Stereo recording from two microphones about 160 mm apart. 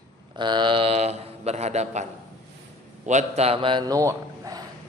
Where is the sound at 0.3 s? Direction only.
30° right (ahead or behind); by 2.0 s 45° right (ahead or behind).